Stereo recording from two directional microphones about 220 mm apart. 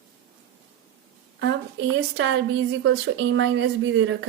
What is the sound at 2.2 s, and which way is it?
A woman's voice, 55° right (ahead or behind).